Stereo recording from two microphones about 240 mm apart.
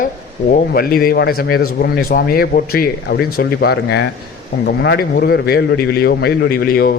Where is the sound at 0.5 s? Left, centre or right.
Left.